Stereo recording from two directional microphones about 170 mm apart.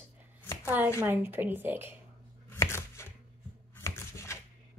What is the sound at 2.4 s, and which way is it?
Chopping, 15° left (ahead or behind).